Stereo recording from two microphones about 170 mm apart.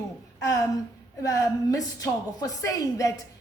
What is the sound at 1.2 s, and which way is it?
A woman's voice, 20° left (ahead or behind).